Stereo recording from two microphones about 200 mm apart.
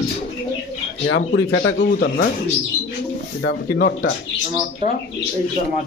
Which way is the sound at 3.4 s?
55° left (ahead or behind).